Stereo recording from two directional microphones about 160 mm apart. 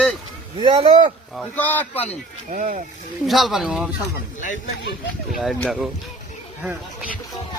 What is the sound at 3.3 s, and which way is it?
Speech, centre (ahead or behind).